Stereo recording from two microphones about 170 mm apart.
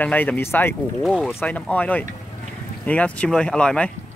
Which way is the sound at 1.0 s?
Centre (ahead or behind).